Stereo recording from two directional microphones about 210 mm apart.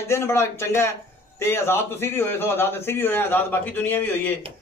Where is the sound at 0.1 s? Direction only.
10° left (ahead or behind).